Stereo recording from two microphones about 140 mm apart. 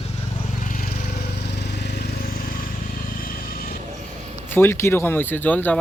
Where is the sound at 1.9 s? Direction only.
90° left.